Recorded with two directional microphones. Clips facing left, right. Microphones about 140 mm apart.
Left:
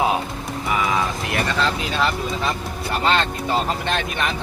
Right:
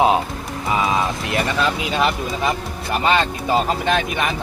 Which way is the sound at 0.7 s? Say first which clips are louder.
Right 2 dB; 25° right (ahead or behind).